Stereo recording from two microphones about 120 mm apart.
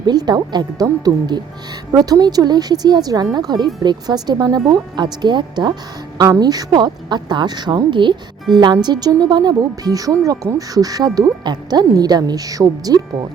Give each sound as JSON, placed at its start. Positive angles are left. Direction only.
{"t": 0.0, "sound": "speech", "side_deg": -35}